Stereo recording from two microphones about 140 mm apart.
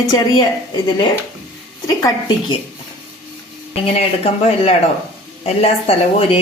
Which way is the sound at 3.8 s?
45° left (ahead or behind).